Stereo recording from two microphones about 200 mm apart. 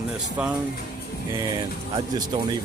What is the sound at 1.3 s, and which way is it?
Speech, 20° right (ahead or behind).